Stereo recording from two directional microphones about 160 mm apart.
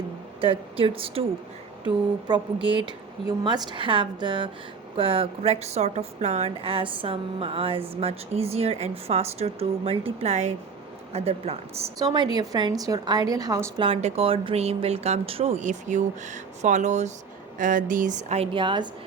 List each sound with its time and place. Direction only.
0.4 s a woman's voice: 35° right (ahead or behind)
2.7 s a woman's voice: 30° right (ahead or behind)
11.9 s a woman's voice: 25° right (ahead or behind)
13.8 s a woman's voice: 35° right (ahead or behind)
18.5 s a woman's voice: 30° right (ahead or behind)